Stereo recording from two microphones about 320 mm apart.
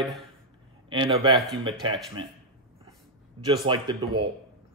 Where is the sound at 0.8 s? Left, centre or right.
Centre.